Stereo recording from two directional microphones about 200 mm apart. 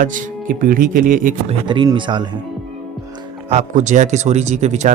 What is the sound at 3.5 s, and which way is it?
Speech, 35° right (ahead or behind).